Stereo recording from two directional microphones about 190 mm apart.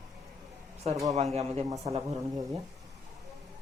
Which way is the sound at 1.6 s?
15° right (ahead or behind).